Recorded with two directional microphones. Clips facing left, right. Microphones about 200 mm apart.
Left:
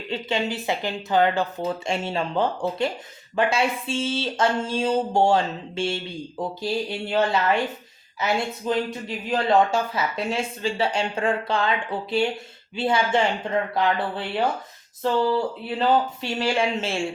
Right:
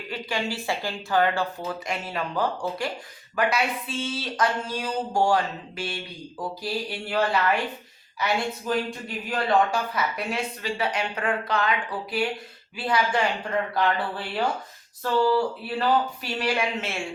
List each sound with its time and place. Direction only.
0.1 s speech: 25° left (ahead or behind)
15.0 s speech: 20° left (ahead or behind)